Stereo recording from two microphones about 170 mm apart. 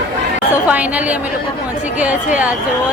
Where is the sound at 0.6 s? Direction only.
10° right (ahead or behind).